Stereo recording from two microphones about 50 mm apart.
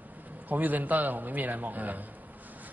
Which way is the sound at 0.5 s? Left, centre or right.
Right.